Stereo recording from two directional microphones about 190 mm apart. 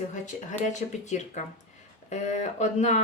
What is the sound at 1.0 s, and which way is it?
Speech, 40° left (ahead or behind).